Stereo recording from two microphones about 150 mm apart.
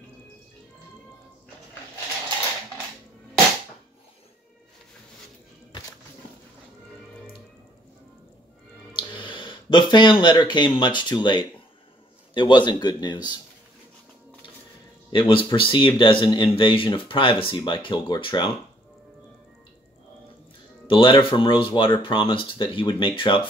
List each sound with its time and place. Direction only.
8.9 s speech: 35° left (ahead or behind)
15.0 s speech: 35° left (ahead or behind)
20.8 s speech: 35° left (ahead or behind)